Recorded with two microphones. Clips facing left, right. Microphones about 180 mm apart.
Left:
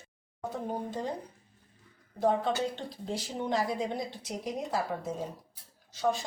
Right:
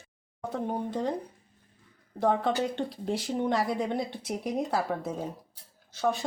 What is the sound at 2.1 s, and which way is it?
Speech, 60° right (ahead or behind).